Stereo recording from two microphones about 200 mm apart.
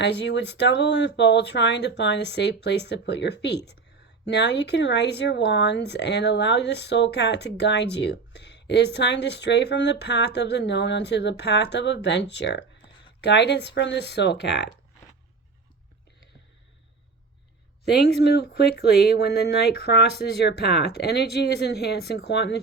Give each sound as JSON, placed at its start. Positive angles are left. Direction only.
{"t": 0.0, "sound": "speech", "side_deg": 60}
{"t": 17.8, "sound": "speech", "side_deg": 55}